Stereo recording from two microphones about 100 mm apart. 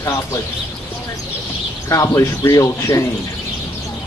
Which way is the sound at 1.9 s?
30° left (ahead or behind).